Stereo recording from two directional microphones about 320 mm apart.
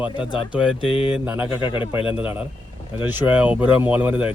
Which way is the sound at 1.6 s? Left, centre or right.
Centre.